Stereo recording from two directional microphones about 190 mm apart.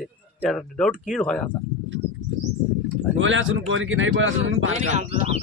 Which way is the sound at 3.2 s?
80° right.